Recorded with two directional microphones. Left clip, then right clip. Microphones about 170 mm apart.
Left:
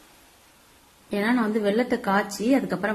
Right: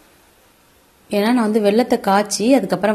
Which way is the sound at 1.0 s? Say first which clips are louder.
Right 7 dB; 30° right (ahead or behind).